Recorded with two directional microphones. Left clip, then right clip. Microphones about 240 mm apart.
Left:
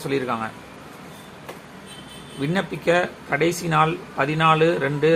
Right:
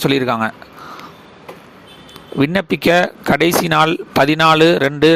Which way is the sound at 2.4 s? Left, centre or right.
Right.